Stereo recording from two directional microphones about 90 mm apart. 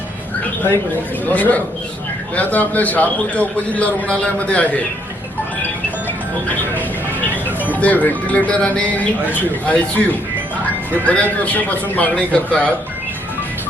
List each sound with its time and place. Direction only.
1.2 s a man's voice: 15° left (ahead or behind)
6.7 s a man's voice: 20° left (ahead or behind)